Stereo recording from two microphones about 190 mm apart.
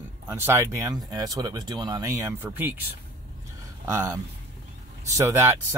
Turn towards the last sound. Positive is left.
turn(degrees=-15)  # may be behind; listen again after turning